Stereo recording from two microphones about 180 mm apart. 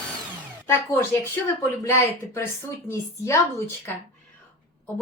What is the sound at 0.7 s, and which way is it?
A woman's voice, 15° left (ahead or behind).